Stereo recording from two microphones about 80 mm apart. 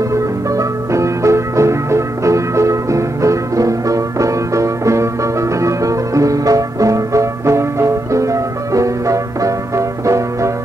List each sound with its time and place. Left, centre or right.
0.1 s music: right
5.6 s banjo: right